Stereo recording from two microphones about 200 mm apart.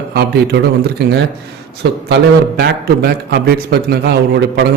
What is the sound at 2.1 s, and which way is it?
A man's voice, 55° right (ahead or behind).